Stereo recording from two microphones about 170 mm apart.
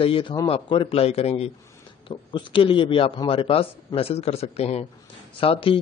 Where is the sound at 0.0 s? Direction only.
30° left (ahead or behind).